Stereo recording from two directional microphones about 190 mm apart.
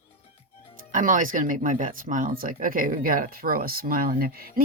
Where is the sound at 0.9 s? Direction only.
45° right (ahead or behind).